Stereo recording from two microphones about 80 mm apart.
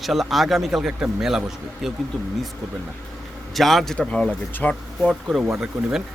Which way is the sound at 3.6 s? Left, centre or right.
Centre.